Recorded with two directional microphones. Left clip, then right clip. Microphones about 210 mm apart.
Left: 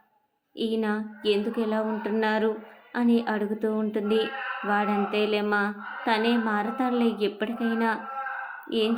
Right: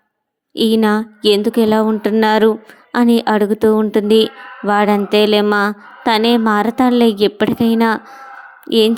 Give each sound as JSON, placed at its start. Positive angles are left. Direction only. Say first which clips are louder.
{"t": 0.5, "sound": "speech", "louder": "right 14 dB", "side_deg": -50}